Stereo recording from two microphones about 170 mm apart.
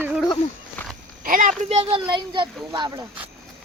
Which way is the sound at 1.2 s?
55° right (ahead or behind).